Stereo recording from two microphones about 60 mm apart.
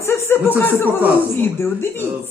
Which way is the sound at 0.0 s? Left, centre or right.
Left.